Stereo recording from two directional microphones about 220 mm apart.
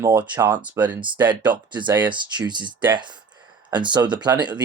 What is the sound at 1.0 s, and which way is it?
Speech, 20° right (ahead or behind).